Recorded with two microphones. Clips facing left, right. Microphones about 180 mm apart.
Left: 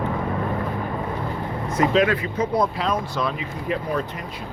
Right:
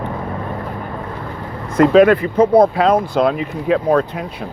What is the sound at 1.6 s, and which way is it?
Speech, 55° right (ahead or behind).